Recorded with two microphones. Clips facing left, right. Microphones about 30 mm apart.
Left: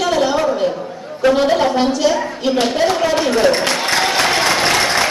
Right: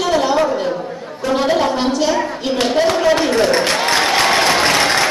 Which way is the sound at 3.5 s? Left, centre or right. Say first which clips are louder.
Right 1 dB; centre.